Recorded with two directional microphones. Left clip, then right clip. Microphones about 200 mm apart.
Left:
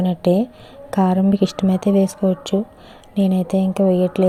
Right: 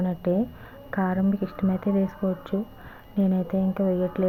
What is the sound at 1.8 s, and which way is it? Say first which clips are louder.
Speech: left 10 dB; 5° left (ahead or behind).